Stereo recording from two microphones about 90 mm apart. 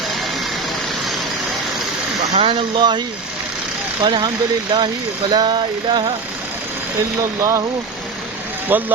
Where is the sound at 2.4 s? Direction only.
75° right (ahead or behind).